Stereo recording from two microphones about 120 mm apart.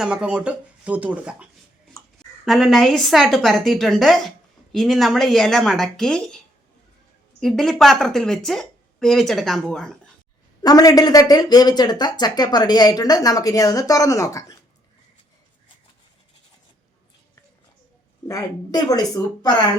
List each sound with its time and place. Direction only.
0.0 s a woman's voice: 10° right (ahead or behind)
10.6 s speech: 30° left (ahead or behind)
18.3 s speech: 30° left (ahead or behind)